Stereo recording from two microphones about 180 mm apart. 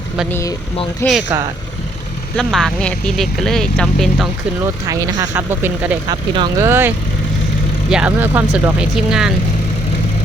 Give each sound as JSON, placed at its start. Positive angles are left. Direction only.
{"t": 0.3, "sound": "speech", "side_deg": 15}
{"t": 2.3, "sound": "speech", "side_deg": 0}
{"t": 4.9, "sound": "speech", "side_deg": -20}
{"t": 6.1, "sound": "speech", "side_deg": -25}
{"t": 6.7, "sound": "speech", "side_deg": -10}